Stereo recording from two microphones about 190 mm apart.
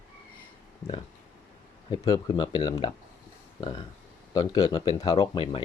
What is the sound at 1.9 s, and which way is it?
Speech, 25° left (ahead or behind).